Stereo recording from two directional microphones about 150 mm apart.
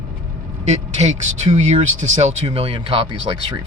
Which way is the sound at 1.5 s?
50° right (ahead or behind).